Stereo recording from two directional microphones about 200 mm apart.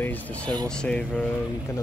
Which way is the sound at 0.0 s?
10° left (ahead or behind).